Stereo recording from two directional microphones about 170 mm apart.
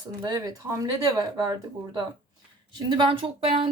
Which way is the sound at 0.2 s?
25° right (ahead or behind).